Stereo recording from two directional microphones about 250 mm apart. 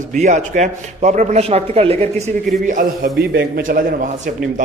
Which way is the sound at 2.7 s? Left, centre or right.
Right.